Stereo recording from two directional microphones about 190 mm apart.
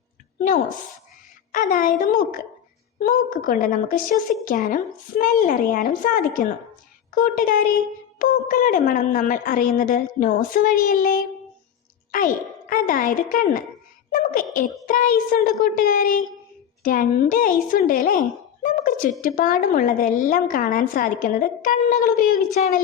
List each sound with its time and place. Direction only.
1.5 s a woman's voice: 45° left (ahead or behind)
14.1 s a sound: 45° left (ahead or behind)
14.5 s a woman's voice: 45° left (ahead or behind)